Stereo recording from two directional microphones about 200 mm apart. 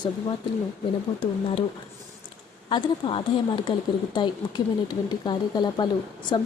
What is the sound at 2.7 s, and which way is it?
Speech, 25° left (ahead or behind).